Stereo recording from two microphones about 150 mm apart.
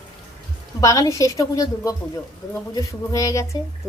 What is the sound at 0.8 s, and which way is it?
A woman's voice, 20° left (ahead or behind).